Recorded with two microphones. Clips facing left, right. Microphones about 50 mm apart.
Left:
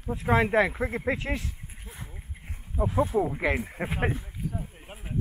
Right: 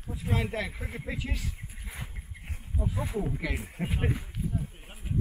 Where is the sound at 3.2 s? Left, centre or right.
Left.